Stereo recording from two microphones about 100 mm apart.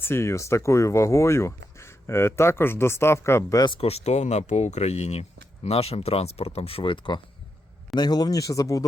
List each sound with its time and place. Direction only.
0.0 s speech: 25° left (ahead or behind)
3.8 s speech: 90° left; by 7.2 s 55° left (ahead or behind)
7.9 s speech: 45° left (ahead or behind)